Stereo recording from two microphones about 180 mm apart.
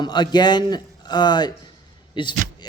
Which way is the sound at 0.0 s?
25° left (ahead or behind).